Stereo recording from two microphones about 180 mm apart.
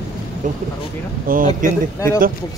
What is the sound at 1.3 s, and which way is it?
Speech, 50° right (ahead or behind).